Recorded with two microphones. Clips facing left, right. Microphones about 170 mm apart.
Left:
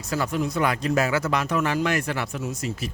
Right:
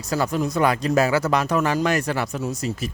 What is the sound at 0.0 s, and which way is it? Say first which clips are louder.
Speech: right 3 dB; 40° right (ahead or behind).